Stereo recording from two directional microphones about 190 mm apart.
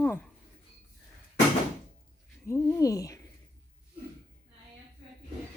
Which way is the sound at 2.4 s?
15° left (ahead or behind).